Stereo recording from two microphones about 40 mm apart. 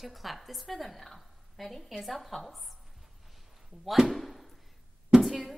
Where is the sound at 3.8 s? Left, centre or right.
Centre.